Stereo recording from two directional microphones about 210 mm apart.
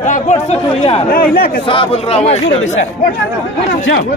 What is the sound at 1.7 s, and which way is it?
Speech, 25° left (ahead or behind).